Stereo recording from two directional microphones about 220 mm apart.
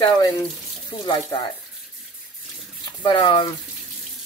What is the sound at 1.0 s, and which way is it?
Speech, 20° left (ahead or behind).